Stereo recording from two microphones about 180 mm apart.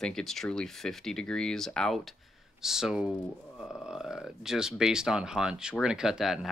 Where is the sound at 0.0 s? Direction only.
Centre (ahead or behind).